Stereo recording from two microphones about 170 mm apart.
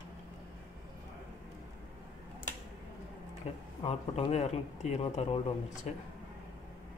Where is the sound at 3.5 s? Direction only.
35° left (ahead or behind).